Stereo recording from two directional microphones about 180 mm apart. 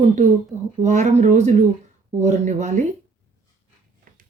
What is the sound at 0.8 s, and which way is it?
Speech, 40° right (ahead or behind).